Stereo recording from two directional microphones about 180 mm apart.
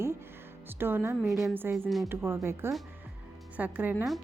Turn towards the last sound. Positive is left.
turn(degrees=-5)  # may be behind; listen again after turning